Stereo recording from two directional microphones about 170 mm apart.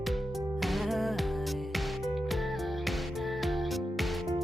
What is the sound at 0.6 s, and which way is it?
Music, centre (ahead or behind).